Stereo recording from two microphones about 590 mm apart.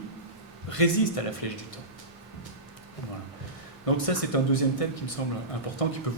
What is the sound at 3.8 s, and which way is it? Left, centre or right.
Speech, left.